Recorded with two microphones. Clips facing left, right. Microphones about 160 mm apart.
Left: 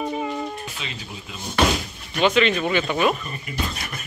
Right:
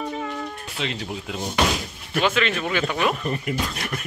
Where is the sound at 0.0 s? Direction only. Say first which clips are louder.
Left 3 dB; 15° left (ahead or behind).